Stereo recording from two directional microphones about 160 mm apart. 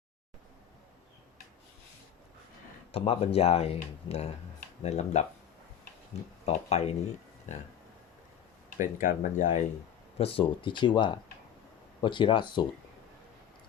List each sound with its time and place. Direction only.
2.9 s speech: 40° left (ahead or behind)
6.4 s speech: 40° left (ahead or behind)
8.8 s speech: 55° left (ahead or behind)
10.2 s speech: 35° left (ahead or behind)